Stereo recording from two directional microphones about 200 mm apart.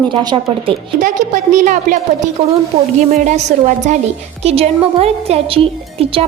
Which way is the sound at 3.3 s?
35° right (ahead or behind).